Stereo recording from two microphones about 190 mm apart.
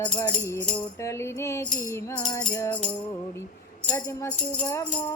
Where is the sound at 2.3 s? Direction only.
15° left (ahead or behind).